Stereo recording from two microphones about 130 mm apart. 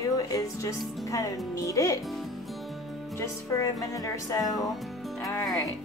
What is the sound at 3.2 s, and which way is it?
Speech, 25° left (ahead or behind).